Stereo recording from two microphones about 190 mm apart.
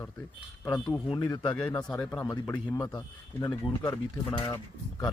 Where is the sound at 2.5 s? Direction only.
15° left (ahead or behind).